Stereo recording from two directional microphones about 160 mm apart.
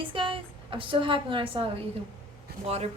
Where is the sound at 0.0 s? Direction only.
30° right (ahead or behind).